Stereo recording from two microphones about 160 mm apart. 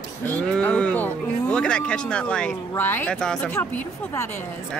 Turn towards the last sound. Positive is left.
turn(degrees=10)  # may be behind; listen again after turning